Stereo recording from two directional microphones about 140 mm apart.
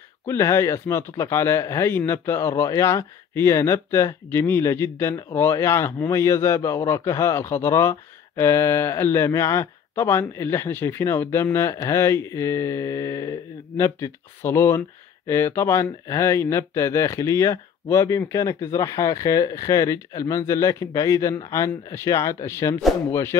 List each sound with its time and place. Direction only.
0.3 s speech: 20° left (ahead or behind)